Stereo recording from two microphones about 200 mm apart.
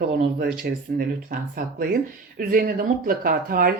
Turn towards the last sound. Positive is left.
turn(degrees=-45)  # may be behind; listen again after turning